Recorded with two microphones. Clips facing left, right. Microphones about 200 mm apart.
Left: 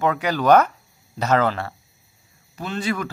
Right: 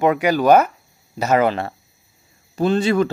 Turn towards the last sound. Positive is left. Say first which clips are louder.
# right 9 dB
turn(degrees=-30)  # may be behind; listen again after turning